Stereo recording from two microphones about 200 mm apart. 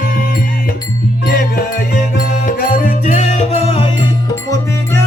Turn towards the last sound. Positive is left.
turn(degrees=30)  # may be behind; listen again after turning